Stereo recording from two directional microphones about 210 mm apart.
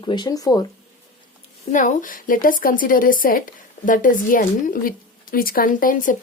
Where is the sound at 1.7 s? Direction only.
40° left (ahead or behind).